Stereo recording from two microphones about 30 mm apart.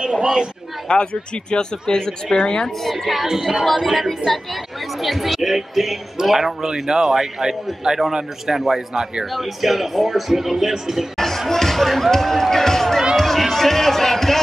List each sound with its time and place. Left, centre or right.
0.0 s a man's voice: right
0.8 s speech: left
2.8 s speech: centre
3.3 s a man's voice: centre
3.6 s speech: centre
5.0 s a man's voice: centre
11.1 s a sound: centre
13.1 s music: centre